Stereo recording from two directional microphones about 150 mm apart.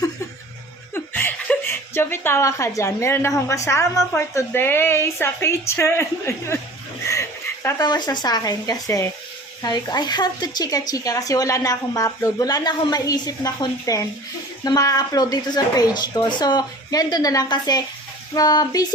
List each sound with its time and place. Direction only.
0.9 s speech: 15° left (ahead or behind)
7.1 s dog: 20° left (ahead or behind)
7.9 s speech: 30° left (ahead or behind)